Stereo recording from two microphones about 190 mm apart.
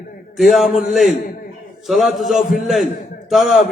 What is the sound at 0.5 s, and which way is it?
A man's voice, centre (ahead or behind).